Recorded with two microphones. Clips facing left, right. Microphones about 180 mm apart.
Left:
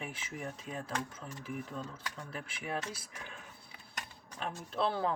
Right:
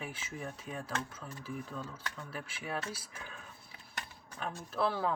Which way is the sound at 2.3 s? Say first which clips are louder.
Left 1 dB; 25° left (ahead or behind).